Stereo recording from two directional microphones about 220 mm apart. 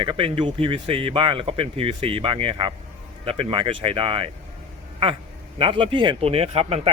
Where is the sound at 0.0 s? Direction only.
25° right (ahead or behind).